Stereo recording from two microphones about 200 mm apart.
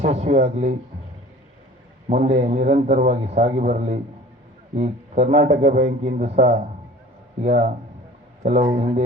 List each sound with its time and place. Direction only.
0.0 s a man's voice: 35° right (ahead or behind)
2.0 s a man's voice: 35° right (ahead or behind)
8.8 s a man's voice: 35° right (ahead or behind)